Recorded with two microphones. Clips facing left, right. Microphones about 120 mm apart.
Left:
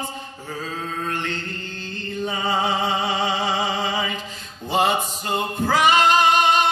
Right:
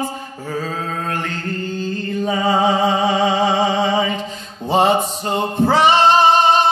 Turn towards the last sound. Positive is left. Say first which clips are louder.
# right 5 dB
turn(degrees=-30)  # may be behind; listen again after turning